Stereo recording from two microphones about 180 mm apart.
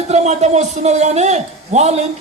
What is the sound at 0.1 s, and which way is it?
Speech, 40° right (ahead or behind).